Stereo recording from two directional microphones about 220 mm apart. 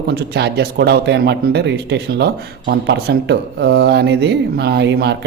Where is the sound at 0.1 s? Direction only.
50° right (ahead or behind).